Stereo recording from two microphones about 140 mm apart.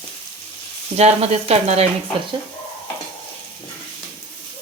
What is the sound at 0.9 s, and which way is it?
Sizzle, 50° right (ahead or behind).